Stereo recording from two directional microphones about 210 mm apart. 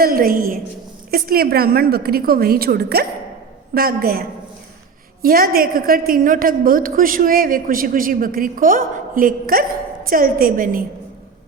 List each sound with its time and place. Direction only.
0.0 s a woman's voice: 45° right (ahead or behind)